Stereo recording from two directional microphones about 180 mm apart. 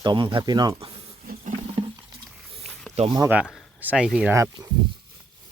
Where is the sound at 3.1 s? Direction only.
20° right (ahead or behind).